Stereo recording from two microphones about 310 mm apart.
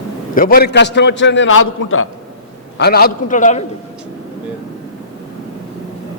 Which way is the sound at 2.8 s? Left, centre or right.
Left.